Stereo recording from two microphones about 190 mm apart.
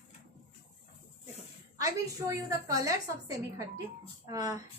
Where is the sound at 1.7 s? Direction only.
15° right (ahead or behind).